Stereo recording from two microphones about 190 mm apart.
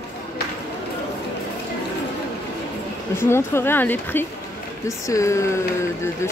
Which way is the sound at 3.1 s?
10° left (ahead or behind).